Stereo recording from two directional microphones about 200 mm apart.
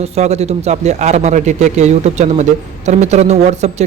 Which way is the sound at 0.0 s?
35° right (ahead or behind).